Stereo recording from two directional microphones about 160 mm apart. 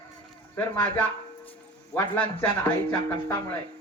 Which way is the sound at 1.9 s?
15° left (ahead or behind).